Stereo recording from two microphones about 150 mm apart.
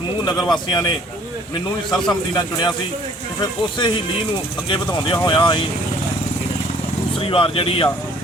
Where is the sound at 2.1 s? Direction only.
30° left (ahead or behind).